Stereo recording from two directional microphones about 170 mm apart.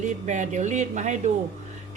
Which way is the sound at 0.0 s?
45° right (ahead or behind).